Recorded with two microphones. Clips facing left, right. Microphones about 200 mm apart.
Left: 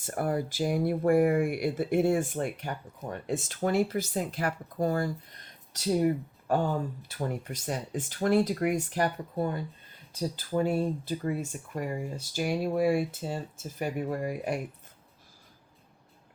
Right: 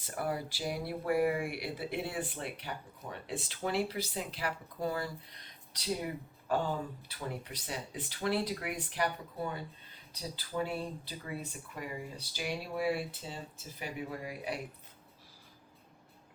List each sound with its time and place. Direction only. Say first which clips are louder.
0.0 s speech: left 6 dB; 50° left (ahead or behind)